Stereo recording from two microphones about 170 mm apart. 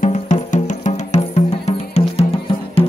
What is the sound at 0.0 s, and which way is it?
Music, 45° left (ahead or behind).